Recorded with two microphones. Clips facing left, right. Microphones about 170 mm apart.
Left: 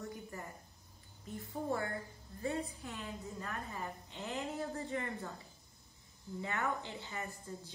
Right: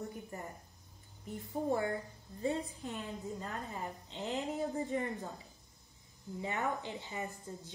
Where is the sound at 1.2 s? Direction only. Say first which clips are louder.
Right 4 dB; 20° right (ahead or behind).